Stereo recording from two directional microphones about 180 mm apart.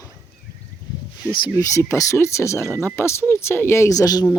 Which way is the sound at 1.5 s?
15° left (ahead or behind).